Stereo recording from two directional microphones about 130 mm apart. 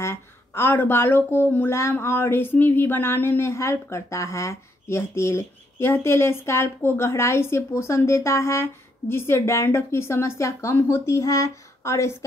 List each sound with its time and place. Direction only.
0.0 s speech: 20° left (ahead or behind)